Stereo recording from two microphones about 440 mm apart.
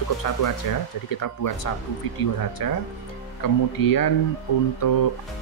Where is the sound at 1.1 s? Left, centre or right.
Left.